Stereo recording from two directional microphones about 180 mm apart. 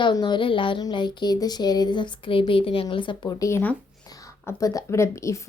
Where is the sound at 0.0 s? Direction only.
25° left (ahead or behind).